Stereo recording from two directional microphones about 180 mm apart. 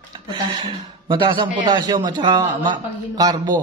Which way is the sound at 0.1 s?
25° right (ahead or behind).